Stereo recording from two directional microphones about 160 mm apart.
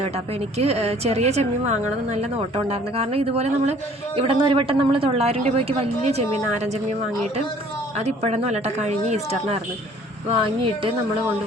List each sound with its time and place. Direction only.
0.5 s a woman's voice: 40° right (ahead or behind)
7.9 s a woman's voice: 45° right (ahead or behind)
10.4 s speech: 35° right (ahead or behind)